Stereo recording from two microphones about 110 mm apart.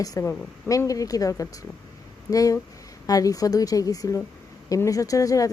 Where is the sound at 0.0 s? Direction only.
30° left (ahead or behind).